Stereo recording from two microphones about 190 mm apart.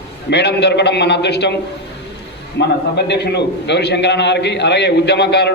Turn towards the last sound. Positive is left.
turn(degrees=60)  # may be behind; listen again after turning